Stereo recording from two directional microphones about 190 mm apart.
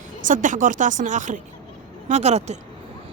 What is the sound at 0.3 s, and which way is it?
Speech, 45° right (ahead or behind).